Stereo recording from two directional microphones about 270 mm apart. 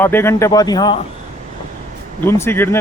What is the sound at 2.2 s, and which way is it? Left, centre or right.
Speech, centre.